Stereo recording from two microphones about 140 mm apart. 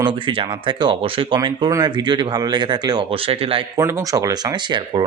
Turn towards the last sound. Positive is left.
turn(degrees=-30)  # may be behind; listen again after turning